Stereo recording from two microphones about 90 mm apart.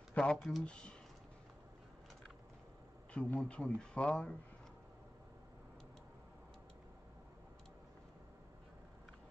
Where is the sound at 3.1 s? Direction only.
10° left (ahead or behind).